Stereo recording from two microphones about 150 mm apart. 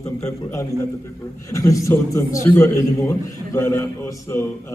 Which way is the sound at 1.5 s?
20° left (ahead or behind).